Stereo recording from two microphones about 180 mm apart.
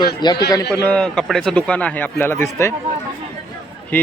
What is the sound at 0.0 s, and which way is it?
Speech, 25° left (ahead or behind).